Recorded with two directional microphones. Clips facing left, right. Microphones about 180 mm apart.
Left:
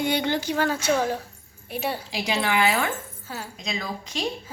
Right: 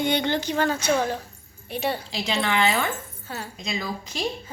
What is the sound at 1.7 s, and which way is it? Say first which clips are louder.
Speech: right 1 dB; 5° left (ahead or behind).